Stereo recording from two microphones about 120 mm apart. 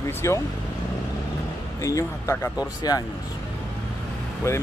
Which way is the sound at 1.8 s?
25° left (ahead or behind).